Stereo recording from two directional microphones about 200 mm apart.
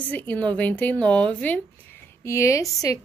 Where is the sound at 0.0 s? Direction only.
10° left (ahead or behind).